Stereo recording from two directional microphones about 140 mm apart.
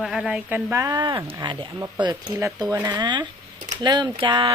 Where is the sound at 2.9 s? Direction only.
30° right (ahead or behind).